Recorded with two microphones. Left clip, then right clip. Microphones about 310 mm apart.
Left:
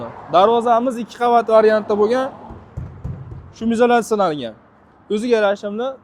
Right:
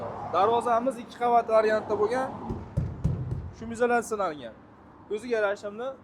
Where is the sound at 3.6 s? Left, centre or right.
Left.